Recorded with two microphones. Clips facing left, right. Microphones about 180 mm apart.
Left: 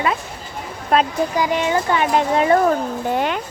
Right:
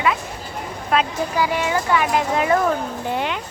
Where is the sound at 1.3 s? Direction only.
20° left (ahead or behind).